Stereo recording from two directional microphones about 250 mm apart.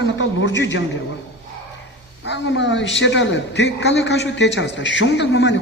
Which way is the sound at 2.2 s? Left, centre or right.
Left.